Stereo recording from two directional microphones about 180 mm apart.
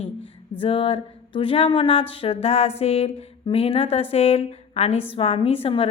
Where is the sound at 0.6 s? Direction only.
30° left (ahead or behind).